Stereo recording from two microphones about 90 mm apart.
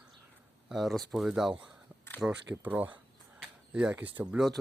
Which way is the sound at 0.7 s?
Centre (ahead or behind).